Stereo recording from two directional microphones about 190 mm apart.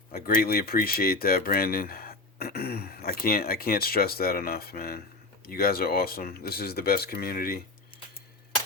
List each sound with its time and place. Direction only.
0.1 s speech: 50° left (ahead or behind)